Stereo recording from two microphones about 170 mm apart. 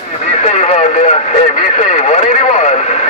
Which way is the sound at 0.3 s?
45° left (ahead or behind).